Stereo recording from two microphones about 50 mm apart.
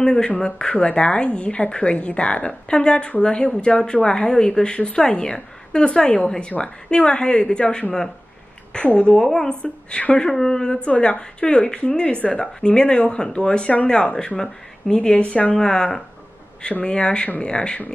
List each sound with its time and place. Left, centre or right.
0.0 s a woman's voice: centre
15.5 s a woman's voice: centre